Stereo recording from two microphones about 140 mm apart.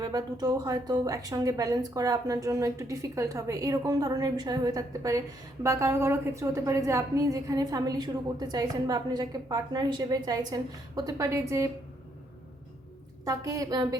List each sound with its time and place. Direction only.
0.0 s a woman's voice: 25° right (ahead or behind)
13.2 s a woman's voice: 25° right (ahead or behind)